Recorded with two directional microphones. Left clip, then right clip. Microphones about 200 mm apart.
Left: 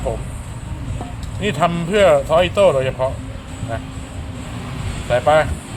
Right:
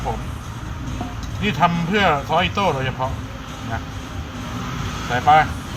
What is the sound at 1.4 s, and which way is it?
Speech, 60° left (ahead or behind).